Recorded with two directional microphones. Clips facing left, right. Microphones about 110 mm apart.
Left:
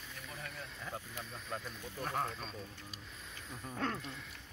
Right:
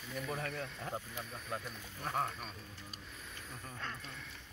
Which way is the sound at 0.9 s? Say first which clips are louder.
Right 2 dB; 5° right (ahead or behind).